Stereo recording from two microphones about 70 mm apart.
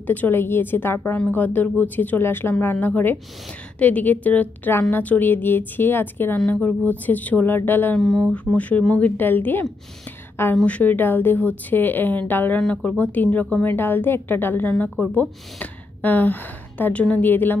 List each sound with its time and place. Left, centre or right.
0.0 s a woman's voice: left
6.3 s a woman's voice: centre
8.0 s speech: centre
8.5 s a woman's voice: left
9.1 s a woman's voice: left
10.5 s a woman's voice: centre
12.5 s a woman's voice: centre
13.7 s a woman's voice: left